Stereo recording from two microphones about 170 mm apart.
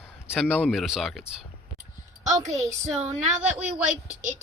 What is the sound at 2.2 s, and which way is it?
Speech, 40° right (ahead or behind).